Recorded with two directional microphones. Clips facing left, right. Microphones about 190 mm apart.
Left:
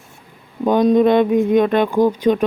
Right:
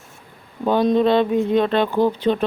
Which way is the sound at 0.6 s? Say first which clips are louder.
Left 3 dB; 15° left (ahead or behind).